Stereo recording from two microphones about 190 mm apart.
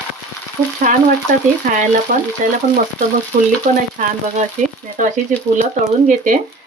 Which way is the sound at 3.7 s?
40° right (ahead or behind).